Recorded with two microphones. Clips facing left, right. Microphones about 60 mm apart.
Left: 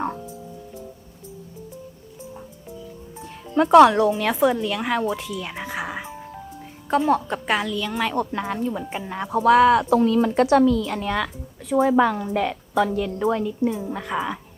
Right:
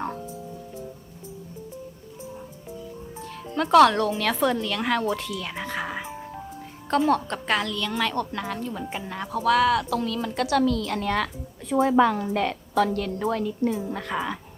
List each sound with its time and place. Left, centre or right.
3.5 s a woman's voice: centre
9.4 s speech: left
10.6 s a woman's voice: centre